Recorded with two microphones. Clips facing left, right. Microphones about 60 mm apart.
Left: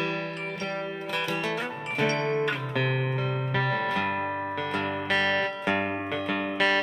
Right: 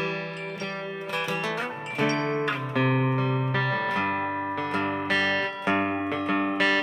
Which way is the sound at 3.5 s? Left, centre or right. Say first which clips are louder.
Right 1 dB; right.